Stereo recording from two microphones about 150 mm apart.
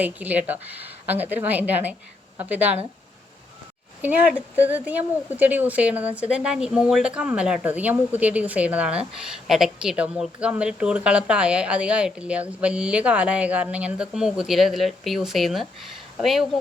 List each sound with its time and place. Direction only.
0.0 s a woman's voice: 10° right (ahead or behind)
4.5 s a woman's voice: 10° right (ahead or behind)